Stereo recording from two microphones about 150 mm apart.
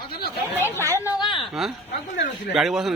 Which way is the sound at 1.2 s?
30° left (ahead or behind).